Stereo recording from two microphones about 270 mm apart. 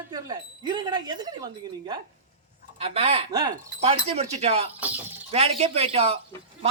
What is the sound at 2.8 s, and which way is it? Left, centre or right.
Speech, right.